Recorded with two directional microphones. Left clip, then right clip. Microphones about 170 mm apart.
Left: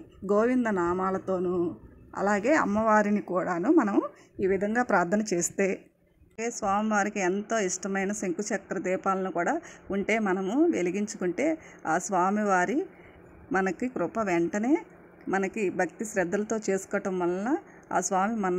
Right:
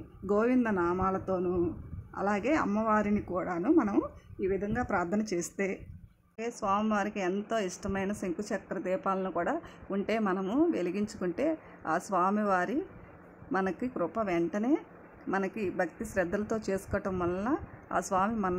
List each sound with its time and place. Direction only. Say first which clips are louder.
0.3 s speech: left 3 dB; 20° left (ahead or behind)
4.4 s a woman's voice: left 6 dB; 35° left (ahead or behind); by 18.5 s 20° left (ahead or behind)